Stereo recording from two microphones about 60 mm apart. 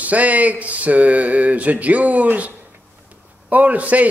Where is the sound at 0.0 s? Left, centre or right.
Right.